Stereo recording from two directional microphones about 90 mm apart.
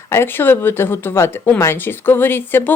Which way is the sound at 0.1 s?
25° left (ahead or behind).